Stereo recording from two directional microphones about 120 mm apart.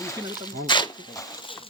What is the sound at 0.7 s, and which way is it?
Speech, 40° left (ahead or behind).